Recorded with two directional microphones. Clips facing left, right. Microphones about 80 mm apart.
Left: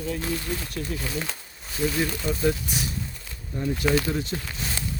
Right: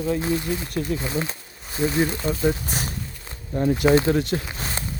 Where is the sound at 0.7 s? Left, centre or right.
Right.